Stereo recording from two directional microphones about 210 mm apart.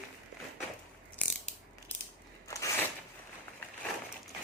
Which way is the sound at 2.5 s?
15° left (ahead or behind).